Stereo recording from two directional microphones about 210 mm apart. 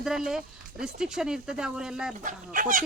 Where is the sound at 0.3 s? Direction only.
5° right (ahead or behind).